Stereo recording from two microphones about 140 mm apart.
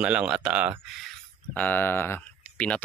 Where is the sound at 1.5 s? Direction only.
15° left (ahead or behind).